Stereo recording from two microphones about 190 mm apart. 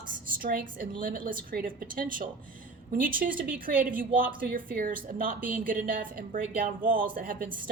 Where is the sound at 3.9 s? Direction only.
45° right (ahead or behind).